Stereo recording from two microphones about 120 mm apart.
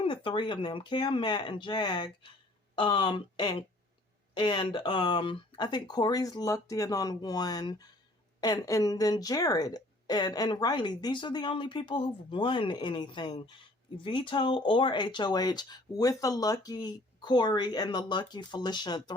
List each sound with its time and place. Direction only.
0.0 s speech: 45° left (ahead or behind)